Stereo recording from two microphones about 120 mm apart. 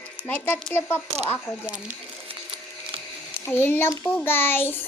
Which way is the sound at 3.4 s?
20° left (ahead or behind).